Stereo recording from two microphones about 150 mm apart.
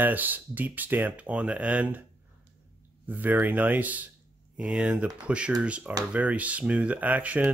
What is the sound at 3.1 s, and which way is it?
Speech, 10° right (ahead or behind).